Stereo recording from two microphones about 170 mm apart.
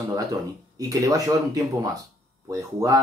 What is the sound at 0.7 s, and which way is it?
Speech, 20° right (ahead or behind).